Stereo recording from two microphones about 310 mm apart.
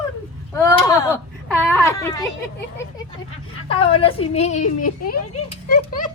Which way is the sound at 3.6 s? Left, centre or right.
Centre.